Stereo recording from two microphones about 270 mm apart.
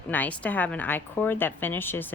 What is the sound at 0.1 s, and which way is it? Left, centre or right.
Speech, centre.